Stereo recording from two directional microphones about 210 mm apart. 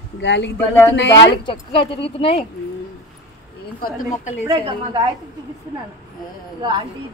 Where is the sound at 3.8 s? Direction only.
40° left (ahead or behind).